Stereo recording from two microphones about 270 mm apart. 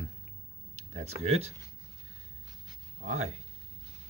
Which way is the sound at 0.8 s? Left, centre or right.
Right.